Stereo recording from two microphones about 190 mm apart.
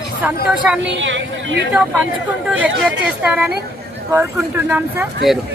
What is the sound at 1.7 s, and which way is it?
A woman's voice, centre (ahead or behind).